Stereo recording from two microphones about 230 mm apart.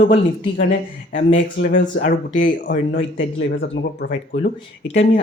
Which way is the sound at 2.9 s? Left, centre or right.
Left.